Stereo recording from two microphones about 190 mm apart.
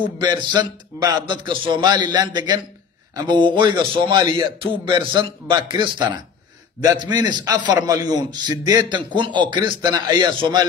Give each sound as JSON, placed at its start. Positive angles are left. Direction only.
{"t": 0.2, "sound": "a man's voice", "side_deg": -25}